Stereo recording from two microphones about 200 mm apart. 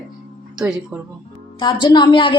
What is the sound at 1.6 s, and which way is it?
Speech, 20° left (ahead or behind).